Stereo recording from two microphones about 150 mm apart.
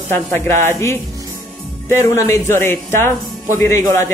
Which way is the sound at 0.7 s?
20° left (ahead or behind).